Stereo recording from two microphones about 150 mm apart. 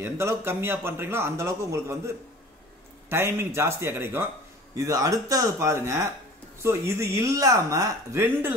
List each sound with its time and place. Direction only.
0.0 s a man's voice: 15° right (ahead or behind)